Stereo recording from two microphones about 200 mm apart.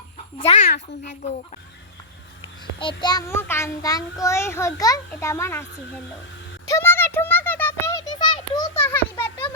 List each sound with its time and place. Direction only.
0.4 s a child's voice: 35° left (ahead or behind)
2.4 s child singing: 25° left (ahead or behind)
6.7 s a sound: 15° left (ahead or behind)